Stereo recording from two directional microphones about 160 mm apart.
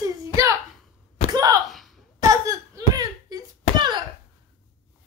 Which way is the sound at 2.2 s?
20° right (ahead or behind).